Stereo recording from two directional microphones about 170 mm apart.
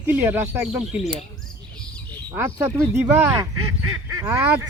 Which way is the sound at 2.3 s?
10° right (ahead or behind).